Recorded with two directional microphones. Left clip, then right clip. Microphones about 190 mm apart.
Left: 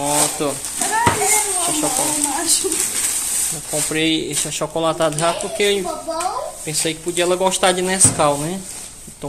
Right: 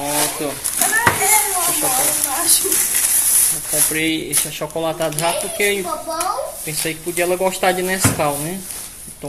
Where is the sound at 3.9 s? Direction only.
15° left (ahead or behind).